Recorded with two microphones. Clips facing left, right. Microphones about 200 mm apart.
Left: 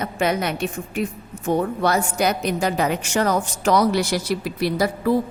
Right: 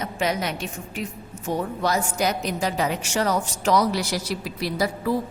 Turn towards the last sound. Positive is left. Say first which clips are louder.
# left 4 dB
turn(degrees=55)  # may be behind; listen again after turning